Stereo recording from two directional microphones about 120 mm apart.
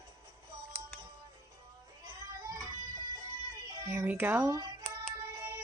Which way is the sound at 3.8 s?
25° right (ahead or behind).